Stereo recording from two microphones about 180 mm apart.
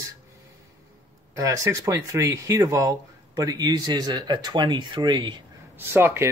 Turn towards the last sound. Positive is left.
turn(degrees=-15)  # may be behind; listen again after turning